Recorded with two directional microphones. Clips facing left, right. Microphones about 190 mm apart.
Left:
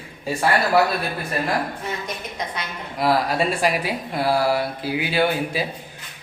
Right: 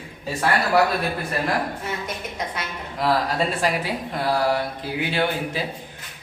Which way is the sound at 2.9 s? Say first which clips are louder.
Left 2 dB; 10° left (ahead or behind).